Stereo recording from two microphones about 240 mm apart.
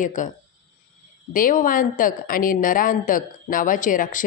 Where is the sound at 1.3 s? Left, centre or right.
Left.